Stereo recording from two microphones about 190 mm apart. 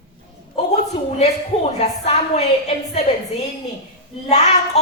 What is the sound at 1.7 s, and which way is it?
Speech, 35° left (ahead or behind).